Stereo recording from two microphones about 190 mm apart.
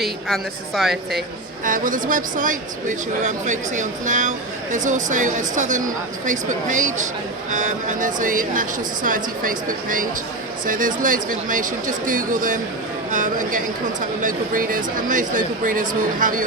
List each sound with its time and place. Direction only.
0.0 s a woman's voice: centre (ahead or behind)
1.6 s speech: 45° right (ahead or behind)